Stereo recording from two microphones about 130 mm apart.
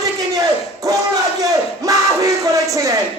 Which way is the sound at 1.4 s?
25° right (ahead or behind).